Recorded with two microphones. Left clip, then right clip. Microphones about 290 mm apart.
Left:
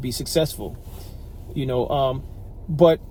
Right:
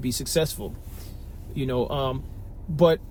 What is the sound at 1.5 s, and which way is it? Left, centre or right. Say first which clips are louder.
Speech: left 4 dB; left.